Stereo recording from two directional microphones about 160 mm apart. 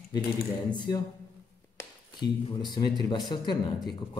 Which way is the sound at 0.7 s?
25° left (ahead or behind).